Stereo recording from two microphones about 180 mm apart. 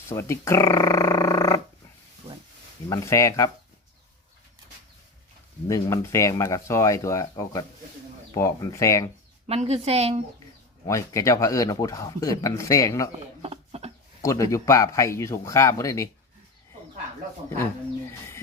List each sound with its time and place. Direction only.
0.1 s speech: 15° left (ahead or behind)
2.9 s speech: 15° left (ahead or behind)
5.6 s speech: 15° left (ahead or behind)
9.5 s speech: 35° right (ahead or behind)
10.8 s speech: 15° left (ahead or behind)
13.4 s a sound: 35° right (ahead or behind)
14.2 s speech: 15° left (ahead or behind)